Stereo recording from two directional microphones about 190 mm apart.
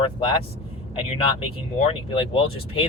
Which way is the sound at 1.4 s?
30° left (ahead or behind).